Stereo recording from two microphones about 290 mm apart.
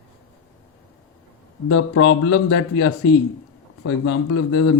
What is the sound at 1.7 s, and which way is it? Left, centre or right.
Speech, left.